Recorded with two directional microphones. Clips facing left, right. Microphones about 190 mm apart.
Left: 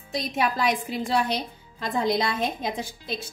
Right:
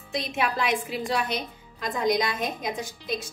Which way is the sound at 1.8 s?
30° left (ahead or behind).